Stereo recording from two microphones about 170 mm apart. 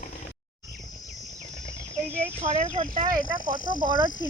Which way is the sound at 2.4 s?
40° right (ahead or behind).